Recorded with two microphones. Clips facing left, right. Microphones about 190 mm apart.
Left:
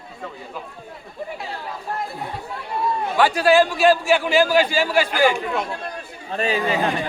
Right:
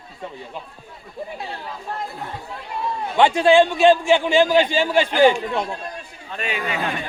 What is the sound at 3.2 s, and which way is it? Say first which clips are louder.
A man's voice: right 2 dB; 25° right (ahead or behind).